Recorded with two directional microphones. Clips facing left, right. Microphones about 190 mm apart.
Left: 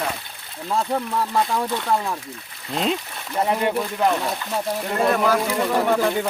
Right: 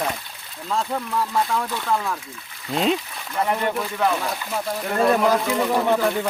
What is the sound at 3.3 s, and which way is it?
Speech, 15° left (ahead or behind).